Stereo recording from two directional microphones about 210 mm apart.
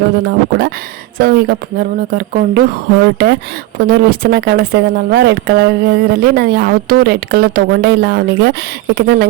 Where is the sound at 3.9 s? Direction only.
45° right (ahead or behind).